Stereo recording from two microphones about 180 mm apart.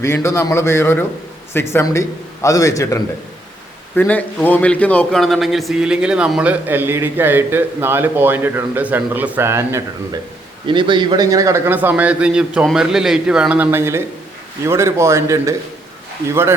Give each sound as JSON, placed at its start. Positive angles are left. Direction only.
{"t": 0.0, "sound": "a man's voice", "side_deg": 15}
{"t": 10.7, "sound": "a man's voice", "side_deg": -25}